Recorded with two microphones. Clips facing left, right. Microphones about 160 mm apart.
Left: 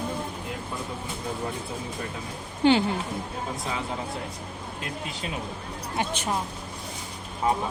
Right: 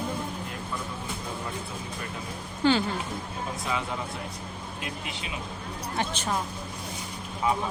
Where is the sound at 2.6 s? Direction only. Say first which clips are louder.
Left 3 dB; 20° left (ahead or behind).